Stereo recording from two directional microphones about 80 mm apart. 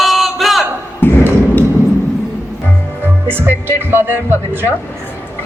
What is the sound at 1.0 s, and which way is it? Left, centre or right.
Thump, left.